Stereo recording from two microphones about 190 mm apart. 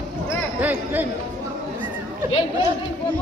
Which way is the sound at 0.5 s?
10° right (ahead or behind).